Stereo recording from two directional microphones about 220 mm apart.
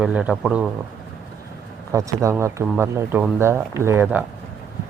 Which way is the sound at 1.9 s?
15° right (ahead or behind).